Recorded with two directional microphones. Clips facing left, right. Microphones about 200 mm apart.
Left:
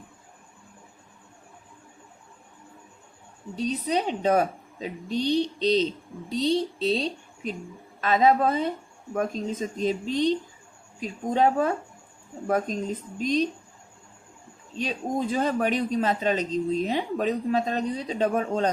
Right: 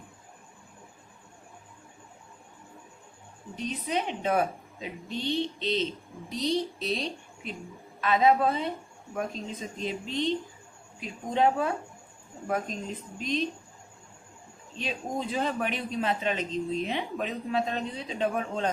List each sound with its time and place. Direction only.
3.5 s a man's voice: 35° left (ahead or behind)
14.8 s a man's voice: 40° left (ahead or behind)